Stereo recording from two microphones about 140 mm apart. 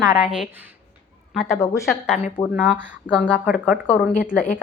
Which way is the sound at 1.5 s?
20° left (ahead or behind).